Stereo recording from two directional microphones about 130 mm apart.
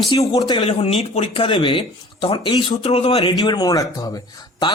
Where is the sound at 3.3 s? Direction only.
30° left (ahead or behind).